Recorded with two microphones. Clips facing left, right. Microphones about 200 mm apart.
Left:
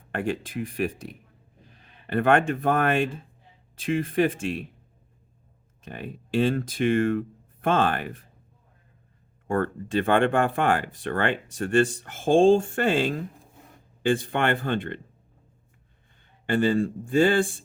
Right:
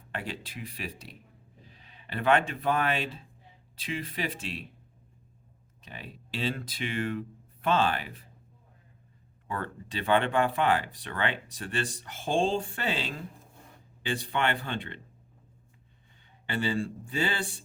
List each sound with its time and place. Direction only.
0.1 s speech: 50° left (ahead or behind)
5.8 s speech: 50° left (ahead or behind)
9.5 s speech: 50° left (ahead or behind)
16.5 s speech: 50° left (ahead or behind)